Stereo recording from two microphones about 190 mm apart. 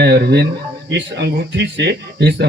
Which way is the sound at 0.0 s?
60° right (ahead or behind).